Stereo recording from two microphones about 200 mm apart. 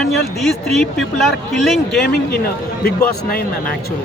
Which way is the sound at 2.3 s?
50° left (ahead or behind).